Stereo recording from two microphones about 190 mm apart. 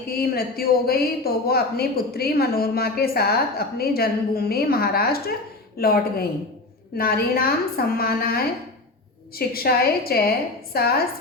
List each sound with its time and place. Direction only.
0.1 s a woman's voice: 55° left (ahead or behind)
9.5 s a woman's voice: 55° left (ahead or behind)